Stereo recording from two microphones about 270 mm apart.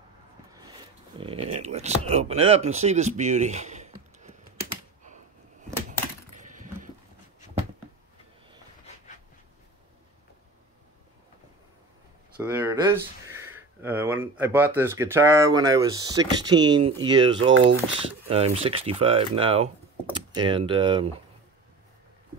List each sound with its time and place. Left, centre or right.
0.6 s speech: centre
5.9 s typewriter: right
12.4 s speech: centre